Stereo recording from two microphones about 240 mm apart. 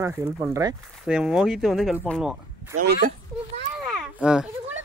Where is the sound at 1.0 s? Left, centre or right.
Centre.